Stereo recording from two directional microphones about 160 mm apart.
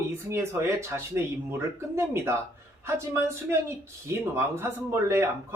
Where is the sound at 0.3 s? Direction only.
15° right (ahead or behind).